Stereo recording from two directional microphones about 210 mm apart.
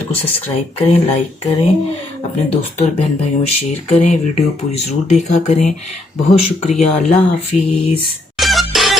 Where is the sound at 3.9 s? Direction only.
35° left (ahead or behind).